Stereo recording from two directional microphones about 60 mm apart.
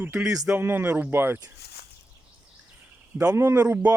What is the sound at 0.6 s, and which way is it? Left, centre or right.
Speech, right.